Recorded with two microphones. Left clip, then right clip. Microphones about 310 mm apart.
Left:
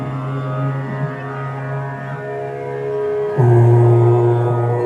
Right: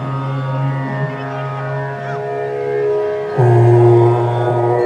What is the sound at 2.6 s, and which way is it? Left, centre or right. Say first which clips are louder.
Music: right 5 dB; right.